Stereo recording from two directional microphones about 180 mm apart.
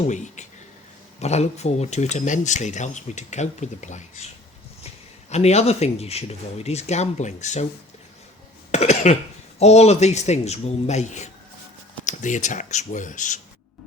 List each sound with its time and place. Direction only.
0.1 s speech: 40° left (ahead or behind)
5.3 s speech: 35° left (ahead or behind)
8.7 s cough: 40° left (ahead or behind)
9.6 s speech: 35° left (ahead or behind)